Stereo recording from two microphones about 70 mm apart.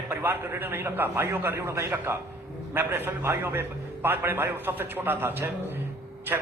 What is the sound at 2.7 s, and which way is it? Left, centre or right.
A man's voice, right.